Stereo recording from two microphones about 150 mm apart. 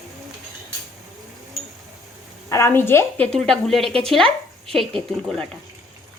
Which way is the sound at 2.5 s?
20° left (ahead or behind).